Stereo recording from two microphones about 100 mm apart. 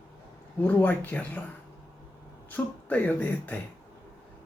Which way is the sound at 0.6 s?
15° left (ahead or behind).